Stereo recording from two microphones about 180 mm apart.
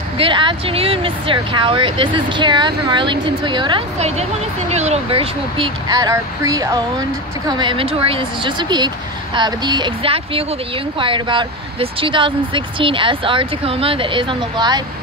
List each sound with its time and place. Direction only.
0.2 s speech: 25° right (ahead or behind)